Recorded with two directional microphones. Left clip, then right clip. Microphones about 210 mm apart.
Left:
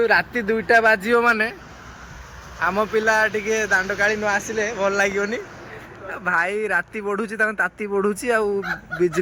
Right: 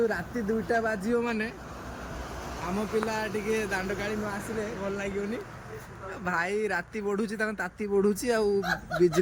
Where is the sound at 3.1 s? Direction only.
5° right (ahead or behind).